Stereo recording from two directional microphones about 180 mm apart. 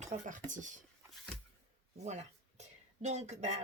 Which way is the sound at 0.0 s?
45° right (ahead or behind).